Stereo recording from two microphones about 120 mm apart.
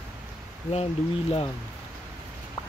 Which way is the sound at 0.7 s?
55° left (ahead or behind).